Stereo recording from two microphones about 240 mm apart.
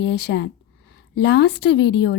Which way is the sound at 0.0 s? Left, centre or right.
Left.